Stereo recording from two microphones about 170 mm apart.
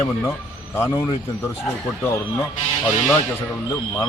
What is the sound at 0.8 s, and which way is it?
Speech, 15° left (ahead or behind).